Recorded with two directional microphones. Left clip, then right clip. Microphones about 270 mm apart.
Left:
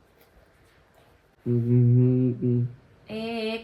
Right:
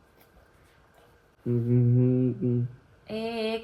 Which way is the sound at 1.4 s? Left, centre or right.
Centre.